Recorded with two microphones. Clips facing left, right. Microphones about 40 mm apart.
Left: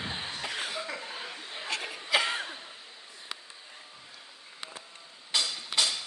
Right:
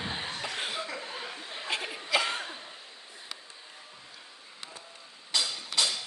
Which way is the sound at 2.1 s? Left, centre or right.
Centre.